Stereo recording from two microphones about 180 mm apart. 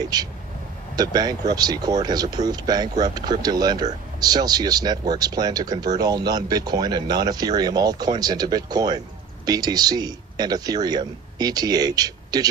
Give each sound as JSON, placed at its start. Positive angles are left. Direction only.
{"t": 0.0, "sound": "speech", "side_deg": -20}